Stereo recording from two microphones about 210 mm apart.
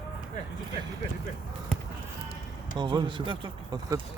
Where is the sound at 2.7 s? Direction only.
20° right (ahead or behind).